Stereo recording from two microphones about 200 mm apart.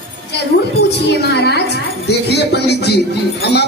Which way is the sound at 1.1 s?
55° left (ahead or behind).